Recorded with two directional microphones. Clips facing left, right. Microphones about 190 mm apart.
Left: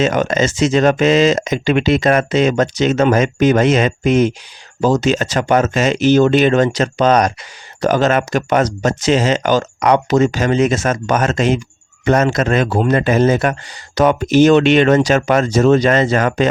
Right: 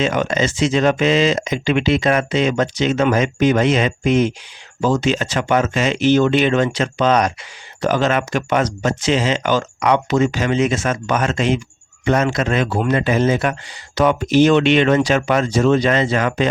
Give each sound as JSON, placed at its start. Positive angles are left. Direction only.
{"t": 0.0, "sound": "speech", "side_deg": 45}